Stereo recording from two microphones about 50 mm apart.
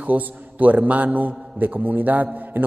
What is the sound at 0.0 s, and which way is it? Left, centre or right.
A man's voice, right.